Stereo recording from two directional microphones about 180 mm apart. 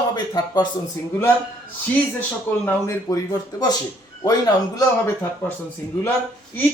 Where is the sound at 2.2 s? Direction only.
10° left (ahead or behind).